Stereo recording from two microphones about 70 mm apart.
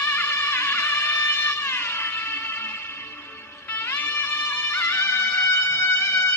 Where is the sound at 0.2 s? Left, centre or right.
Left.